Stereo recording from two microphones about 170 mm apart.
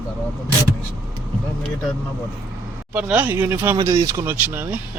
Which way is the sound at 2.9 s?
10° right (ahead or behind).